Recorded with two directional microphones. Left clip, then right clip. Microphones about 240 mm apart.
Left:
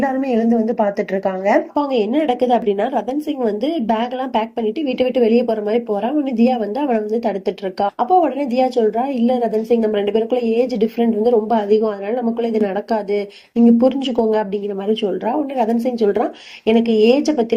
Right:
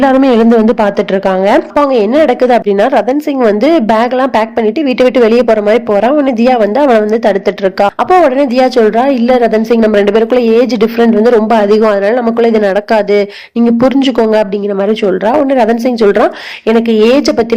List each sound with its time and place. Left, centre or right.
2.0 s a man's voice: right
15.0 s a man's voice: right